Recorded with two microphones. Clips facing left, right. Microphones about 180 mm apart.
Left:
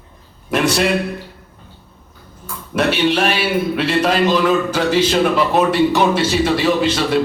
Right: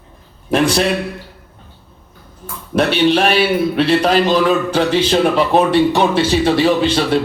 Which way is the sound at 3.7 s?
30° right (ahead or behind).